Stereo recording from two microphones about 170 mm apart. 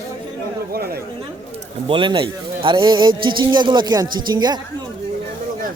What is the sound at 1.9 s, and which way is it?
Speech, 30° right (ahead or behind).